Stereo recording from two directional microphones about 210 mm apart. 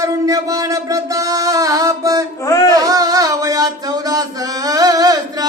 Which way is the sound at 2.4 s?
15° left (ahead or behind).